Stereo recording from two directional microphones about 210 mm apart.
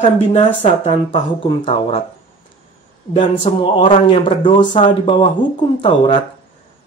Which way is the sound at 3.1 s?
25° left (ahead or behind).